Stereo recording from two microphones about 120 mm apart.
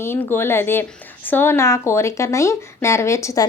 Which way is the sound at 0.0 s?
20° left (ahead or behind).